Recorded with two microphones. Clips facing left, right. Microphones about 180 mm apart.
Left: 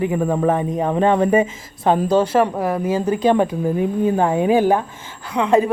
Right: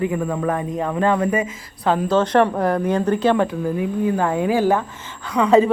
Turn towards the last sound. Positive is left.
turn(degrees=0)  # may be behind; listen again after turning